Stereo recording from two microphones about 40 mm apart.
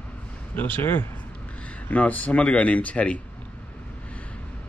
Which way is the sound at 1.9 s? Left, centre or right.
Left.